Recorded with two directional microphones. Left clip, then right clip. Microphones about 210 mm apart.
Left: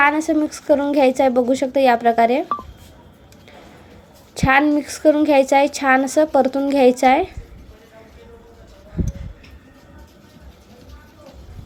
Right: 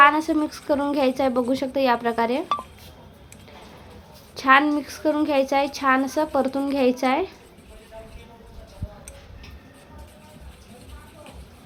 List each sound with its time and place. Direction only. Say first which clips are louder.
0.0 s a woman's voice: even; 15° left (ahead or behind)
4.4 s a child's voice: left 2 dB; 20° left (ahead or behind)